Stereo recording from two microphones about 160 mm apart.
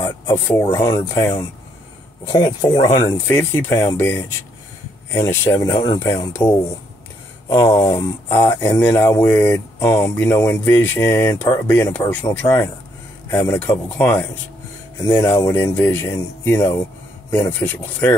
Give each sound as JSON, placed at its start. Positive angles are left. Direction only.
{"t": 0.5, "sound": "speech", "side_deg": 15}